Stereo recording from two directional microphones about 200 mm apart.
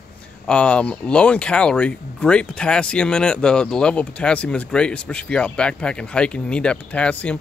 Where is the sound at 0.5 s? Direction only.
5° left (ahead or behind).